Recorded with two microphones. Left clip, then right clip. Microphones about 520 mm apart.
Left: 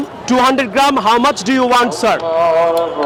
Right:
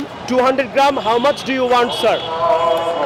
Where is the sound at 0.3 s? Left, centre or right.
Left.